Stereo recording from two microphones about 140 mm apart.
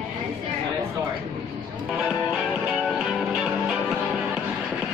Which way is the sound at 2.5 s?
Centre (ahead or behind).